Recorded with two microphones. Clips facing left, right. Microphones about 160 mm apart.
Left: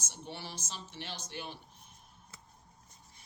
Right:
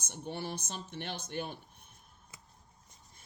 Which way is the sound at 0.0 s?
50° right (ahead or behind).